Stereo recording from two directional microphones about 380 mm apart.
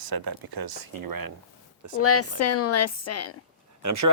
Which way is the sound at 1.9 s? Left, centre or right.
Left.